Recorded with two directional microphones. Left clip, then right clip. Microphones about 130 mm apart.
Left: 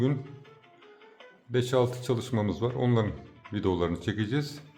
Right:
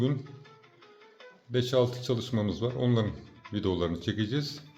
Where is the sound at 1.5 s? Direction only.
25° left (ahead or behind).